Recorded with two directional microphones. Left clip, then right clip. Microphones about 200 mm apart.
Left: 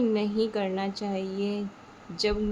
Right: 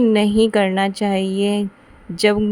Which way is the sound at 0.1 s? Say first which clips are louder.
Right 11 dB; 45° right (ahead or behind).